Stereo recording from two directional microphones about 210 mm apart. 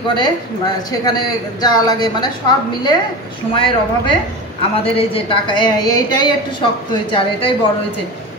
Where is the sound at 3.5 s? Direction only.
25° left (ahead or behind).